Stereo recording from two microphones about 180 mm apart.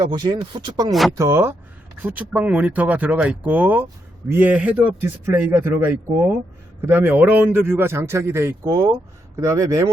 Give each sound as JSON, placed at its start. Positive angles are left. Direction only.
{"t": 0.0, "sound": "a man's voice", "side_deg": -25}